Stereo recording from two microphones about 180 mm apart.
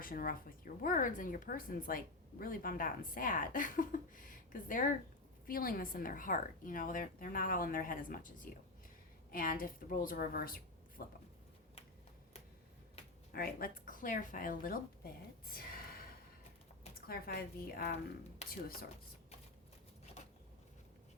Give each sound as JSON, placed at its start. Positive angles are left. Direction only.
{"t": 0.0, "sound": "a woman's voice", "side_deg": 50}
{"t": 13.3, "sound": "speech", "side_deg": 55}
{"t": 15.4, "sound": "a sound", "side_deg": 55}
{"t": 17.1, "sound": "a woman's voice", "side_deg": 55}